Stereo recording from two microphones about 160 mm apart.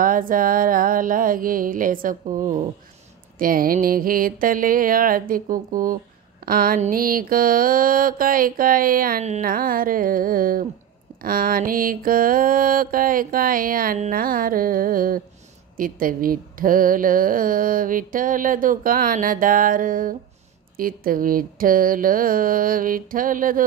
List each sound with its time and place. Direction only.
0.0 s speech: 60° right (ahead or behind)
9.2 s music: 45° right (ahead or behind)
9.5 s speech: 65° right (ahead or behind)